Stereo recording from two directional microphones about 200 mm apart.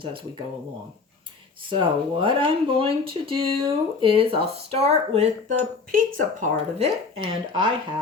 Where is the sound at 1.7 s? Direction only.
25° right (ahead or behind).